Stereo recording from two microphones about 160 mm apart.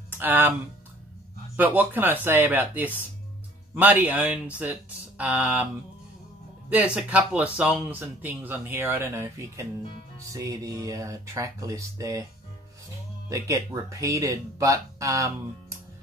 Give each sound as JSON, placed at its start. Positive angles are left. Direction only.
{"t": 0.1, "sound": "speech", "side_deg": -10}
{"t": 1.6, "sound": "speech", "side_deg": -10}
{"t": 6.7, "sound": "speech", "side_deg": -10}
{"t": 13.3, "sound": "speech", "side_deg": -20}